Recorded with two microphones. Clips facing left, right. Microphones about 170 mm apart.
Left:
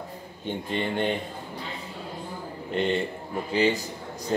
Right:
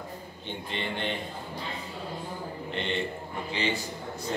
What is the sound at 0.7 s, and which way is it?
Speech, 45° left (ahead or behind).